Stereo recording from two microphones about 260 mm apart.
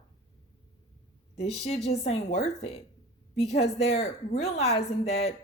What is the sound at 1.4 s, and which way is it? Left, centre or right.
Speech, left.